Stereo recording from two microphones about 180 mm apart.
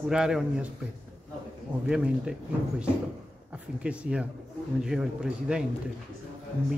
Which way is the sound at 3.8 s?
5° right (ahead or behind).